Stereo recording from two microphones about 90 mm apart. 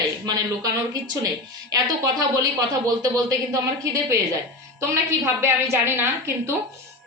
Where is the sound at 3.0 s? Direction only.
45° right (ahead or behind).